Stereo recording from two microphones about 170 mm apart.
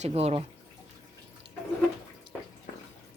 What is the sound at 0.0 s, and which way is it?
Speech, 35° right (ahead or behind).